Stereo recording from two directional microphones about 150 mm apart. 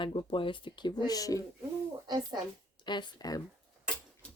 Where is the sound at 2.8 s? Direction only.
30° left (ahead or behind).